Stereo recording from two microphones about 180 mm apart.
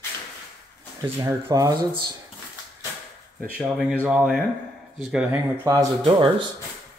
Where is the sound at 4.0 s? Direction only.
5° right (ahead or behind).